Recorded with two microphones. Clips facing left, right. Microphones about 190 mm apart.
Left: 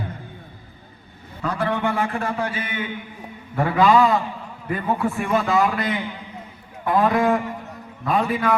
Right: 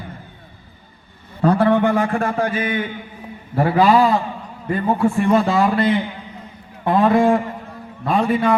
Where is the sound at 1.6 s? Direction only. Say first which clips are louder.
Right 7 dB; 40° right (ahead or behind).